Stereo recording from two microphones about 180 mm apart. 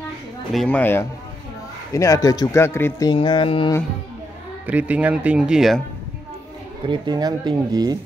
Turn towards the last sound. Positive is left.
turn(degrees=-20)  # may be behind; listen again after turning